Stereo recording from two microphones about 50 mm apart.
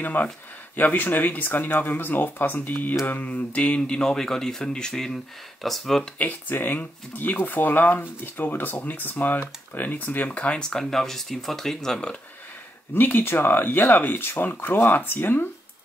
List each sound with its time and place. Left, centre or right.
0.0 s speech: left; by 6.0 s centre
6.1 s speech: left; by 12.1 s centre
12.9 s speech: left